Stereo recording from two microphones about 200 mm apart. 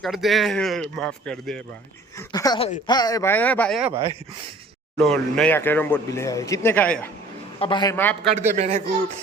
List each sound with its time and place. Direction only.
0.0 s speech: centre (ahead or behind)
2.1 s speech: 15° left (ahead or behind); by 3.9 s centre (ahead or behind)
5.0 s speech: 5° left (ahead or behind)
7.6 s a man's voice: 20° left (ahead or behind)
7.9 s speech: 10° left (ahead or behind)
8.5 s speech: 35° right (ahead or behind)